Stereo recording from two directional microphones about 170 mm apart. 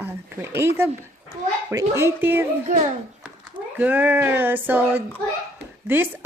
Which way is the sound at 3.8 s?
10° right (ahead or behind).